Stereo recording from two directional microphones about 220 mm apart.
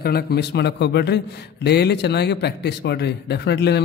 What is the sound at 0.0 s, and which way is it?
A man's voice, 45° left (ahead or behind).